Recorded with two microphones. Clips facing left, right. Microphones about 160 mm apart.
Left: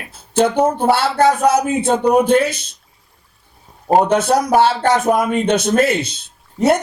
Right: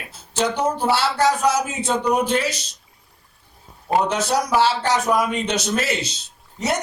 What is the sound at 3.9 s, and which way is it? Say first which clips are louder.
Speech: left 7 dB; 50° left (ahead or behind).